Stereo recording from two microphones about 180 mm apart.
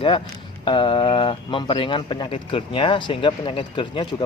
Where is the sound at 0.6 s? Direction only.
25° left (ahead or behind).